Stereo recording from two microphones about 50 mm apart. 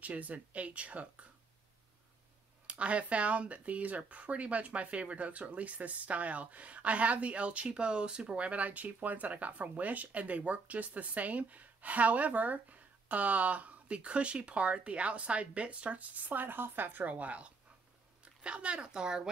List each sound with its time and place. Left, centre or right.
0.0 s speech: right
2.6 s speech: right
17.0 s speech: right